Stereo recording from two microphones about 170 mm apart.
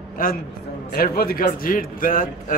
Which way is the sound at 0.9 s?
60° left (ahead or behind).